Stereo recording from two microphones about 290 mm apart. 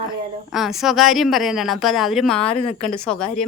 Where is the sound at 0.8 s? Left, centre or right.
Centre.